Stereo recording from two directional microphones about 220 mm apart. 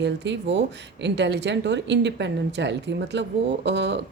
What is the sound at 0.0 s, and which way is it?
Speech, 55° right (ahead or behind).